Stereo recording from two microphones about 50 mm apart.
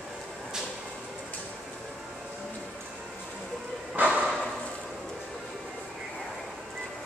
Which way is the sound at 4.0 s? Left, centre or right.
Right.